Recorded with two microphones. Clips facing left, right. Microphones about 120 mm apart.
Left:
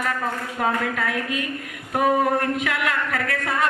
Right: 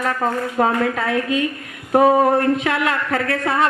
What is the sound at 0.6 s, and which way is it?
Speech, 30° right (ahead or behind).